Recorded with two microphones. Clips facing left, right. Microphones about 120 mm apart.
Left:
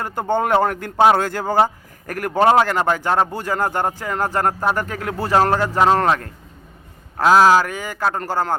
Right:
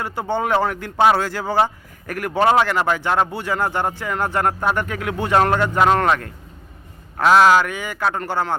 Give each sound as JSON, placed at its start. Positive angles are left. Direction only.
{"t": 0.0, "sound": "speech", "side_deg": 50}